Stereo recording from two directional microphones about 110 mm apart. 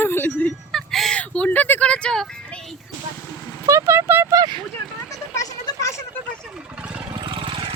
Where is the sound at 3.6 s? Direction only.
25° right (ahead or behind).